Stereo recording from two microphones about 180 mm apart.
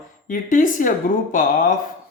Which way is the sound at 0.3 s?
50° left (ahead or behind).